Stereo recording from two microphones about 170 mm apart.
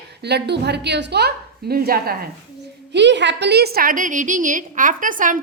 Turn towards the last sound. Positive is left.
turn(degrees=-50)  # may be behind; listen again after turning